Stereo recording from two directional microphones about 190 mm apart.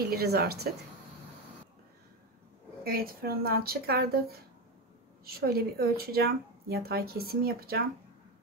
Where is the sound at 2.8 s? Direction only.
50° right (ahead or behind).